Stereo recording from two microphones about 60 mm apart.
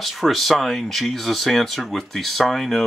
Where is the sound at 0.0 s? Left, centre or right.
Centre.